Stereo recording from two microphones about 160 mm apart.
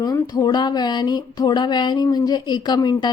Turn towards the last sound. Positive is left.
turn(degrees=25)  # may be behind; listen again after turning